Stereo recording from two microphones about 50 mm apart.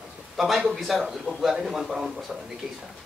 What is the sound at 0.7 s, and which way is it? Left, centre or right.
Speech, centre.